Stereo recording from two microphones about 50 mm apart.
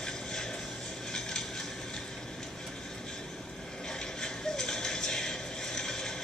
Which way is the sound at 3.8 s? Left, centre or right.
Centre.